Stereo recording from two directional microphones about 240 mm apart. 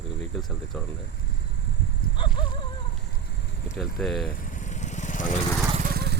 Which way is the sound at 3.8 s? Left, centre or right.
Centre.